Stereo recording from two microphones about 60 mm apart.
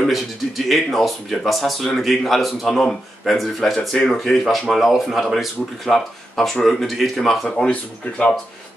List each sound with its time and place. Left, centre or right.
0.0 s speech: centre
7.7 s speech: centre